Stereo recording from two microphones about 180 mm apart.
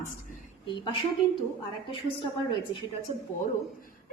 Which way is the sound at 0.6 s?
25° left (ahead or behind).